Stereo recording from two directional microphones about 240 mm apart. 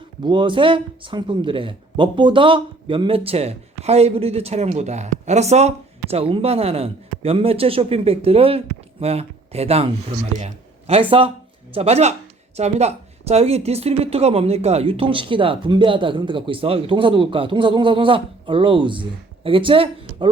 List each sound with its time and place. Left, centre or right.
0.2 s a man's voice: centre